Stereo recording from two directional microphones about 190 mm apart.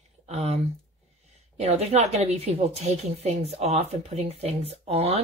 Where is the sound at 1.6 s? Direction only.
35° right (ahead or behind).